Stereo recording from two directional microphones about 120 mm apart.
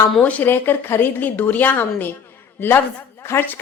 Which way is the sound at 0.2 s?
10° left (ahead or behind).